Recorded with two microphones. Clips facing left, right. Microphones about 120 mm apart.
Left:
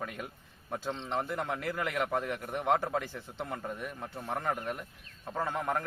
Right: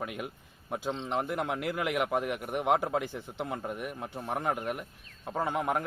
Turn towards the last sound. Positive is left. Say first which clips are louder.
# right 3 dB
turn(degrees=-15)  # may be behind; listen again after turning